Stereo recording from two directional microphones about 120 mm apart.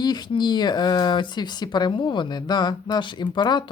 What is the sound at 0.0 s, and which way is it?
Speech, 35° left (ahead or behind).